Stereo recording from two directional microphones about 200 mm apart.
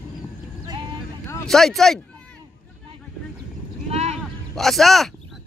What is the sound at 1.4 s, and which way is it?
Speech, centre (ahead or behind).